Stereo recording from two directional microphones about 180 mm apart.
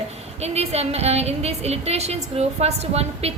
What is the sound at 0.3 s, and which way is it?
A woman's voice, 35° right (ahead or behind).